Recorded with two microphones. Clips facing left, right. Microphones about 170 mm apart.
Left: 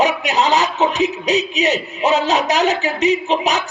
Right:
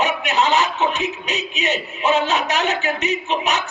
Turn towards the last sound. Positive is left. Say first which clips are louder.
# left 4 dB
turn(degrees=35)  # may be behind; listen again after turning